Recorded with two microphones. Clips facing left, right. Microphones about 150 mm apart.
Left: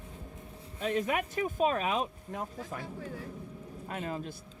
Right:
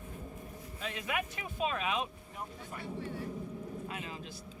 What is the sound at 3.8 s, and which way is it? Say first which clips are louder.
Speech: left 5 dB; 45° left (ahead or behind).